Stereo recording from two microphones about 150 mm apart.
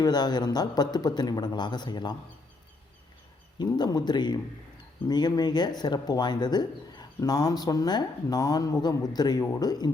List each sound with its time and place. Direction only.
0.0 s speech: 30° left (ahead or behind)
3.6 s speech: 25° left (ahead or behind)